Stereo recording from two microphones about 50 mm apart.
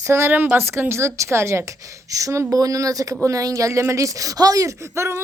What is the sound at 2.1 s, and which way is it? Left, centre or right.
Speech, right.